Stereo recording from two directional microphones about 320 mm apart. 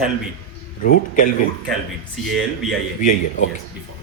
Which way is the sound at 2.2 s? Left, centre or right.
Centre.